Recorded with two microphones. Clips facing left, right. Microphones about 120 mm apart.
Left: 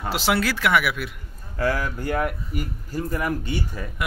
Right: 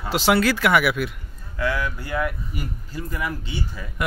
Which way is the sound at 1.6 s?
40° left (ahead or behind).